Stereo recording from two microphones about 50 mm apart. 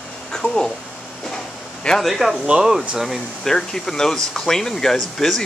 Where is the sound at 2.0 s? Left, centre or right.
Centre.